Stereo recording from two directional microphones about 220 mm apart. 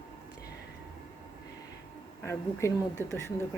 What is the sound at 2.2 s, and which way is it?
Speech, 15° left (ahead or behind).